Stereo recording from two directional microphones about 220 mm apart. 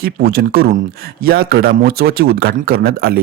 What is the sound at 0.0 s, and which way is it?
A man's voice, 45° right (ahead or behind).